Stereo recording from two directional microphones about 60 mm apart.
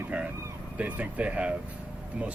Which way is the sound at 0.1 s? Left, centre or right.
Right.